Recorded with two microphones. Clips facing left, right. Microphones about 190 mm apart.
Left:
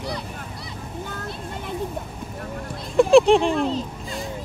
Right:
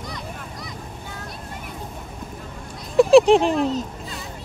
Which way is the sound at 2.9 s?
Centre (ahead or behind).